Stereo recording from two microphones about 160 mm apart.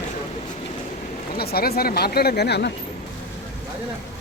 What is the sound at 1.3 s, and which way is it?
Speech, 75° left (ahead or behind).